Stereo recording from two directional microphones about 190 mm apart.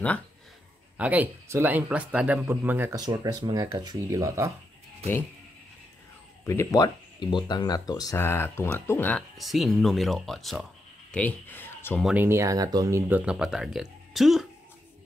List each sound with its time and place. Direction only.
0.9 s speech: 10° right (ahead or behind)
3.1 s speech: 25° right (ahead or behind)
6.4 s speech: 15° left (ahead or behind)
9.4 s speech: centre (ahead or behind)
12.0 s speech: 10° right (ahead or behind)